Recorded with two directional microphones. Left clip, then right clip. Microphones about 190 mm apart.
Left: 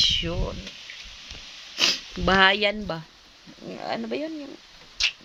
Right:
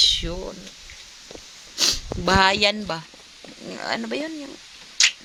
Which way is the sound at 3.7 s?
5° right (ahead or behind).